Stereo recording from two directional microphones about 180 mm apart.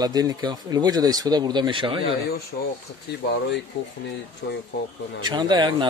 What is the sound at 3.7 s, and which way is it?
Speech, 75° left (ahead or behind).